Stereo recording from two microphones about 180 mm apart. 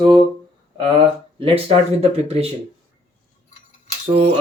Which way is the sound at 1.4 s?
35° right (ahead or behind).